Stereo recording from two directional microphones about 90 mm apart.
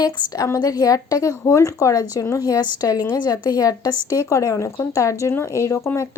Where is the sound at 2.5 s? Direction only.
45° left (ahead or behind).